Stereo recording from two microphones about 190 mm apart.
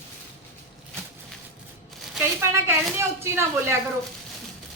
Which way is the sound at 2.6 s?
15° right (ahead or behind).